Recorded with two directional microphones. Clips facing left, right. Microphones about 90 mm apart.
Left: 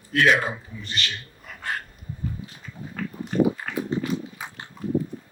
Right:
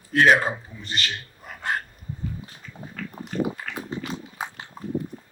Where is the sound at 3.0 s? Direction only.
35° left (ahead or behind).